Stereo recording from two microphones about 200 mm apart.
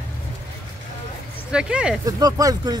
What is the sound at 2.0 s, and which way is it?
Speech, 20° right (ahead or behind).